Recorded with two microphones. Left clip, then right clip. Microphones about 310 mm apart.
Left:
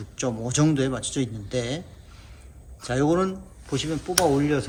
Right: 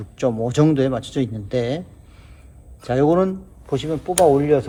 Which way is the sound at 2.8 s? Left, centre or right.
Right.